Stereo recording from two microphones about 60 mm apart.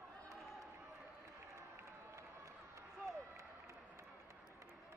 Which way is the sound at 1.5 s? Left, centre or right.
Right.